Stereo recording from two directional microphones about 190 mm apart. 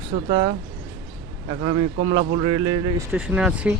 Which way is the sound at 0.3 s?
25° right (ahead or behind).